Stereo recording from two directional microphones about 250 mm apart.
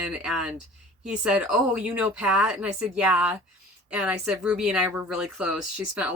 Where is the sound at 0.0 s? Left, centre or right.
Centre.